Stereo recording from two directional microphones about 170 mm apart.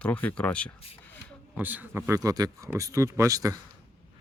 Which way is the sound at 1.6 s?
10° right (ahead or behind).